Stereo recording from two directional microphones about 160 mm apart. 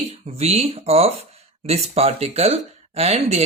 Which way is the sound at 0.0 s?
40° right (ahead or behind).